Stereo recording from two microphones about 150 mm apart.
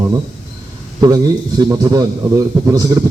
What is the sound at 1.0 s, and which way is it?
A man's voice, 25° right (ahead or behind).